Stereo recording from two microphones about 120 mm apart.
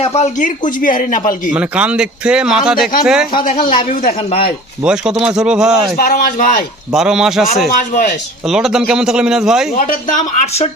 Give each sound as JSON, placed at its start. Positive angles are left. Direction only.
{"t": 0.0, "sound": "speech", "side_deg": 65}
{"t": 1.5, "sound": "speech", "side_deg": -10}
{"t": 3.6, "sound": "speech", "side_deg": 50}
{"t": 4.8, "sound": "speech", "side_deg": -5}
{"t": 6.1, "sound": "speech", "side_deg": 90}
{"t": 6.9, "sound": "speech", "side_deg": -5}
{"t": 9.7, "sound": "speech", "side_deg": 90}